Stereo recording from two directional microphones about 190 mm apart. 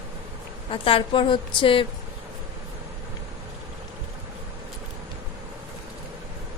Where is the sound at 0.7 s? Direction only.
30° left (ahead or behind).